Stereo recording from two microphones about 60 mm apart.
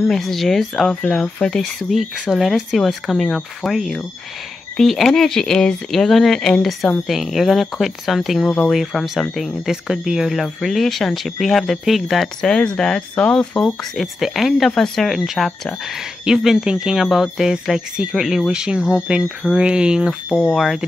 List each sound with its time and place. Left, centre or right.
0.0 s speech: centre
3.7 s speech: centre
13.9 s speech: centre
16.3 s speech: centre
20.5 s speech: centre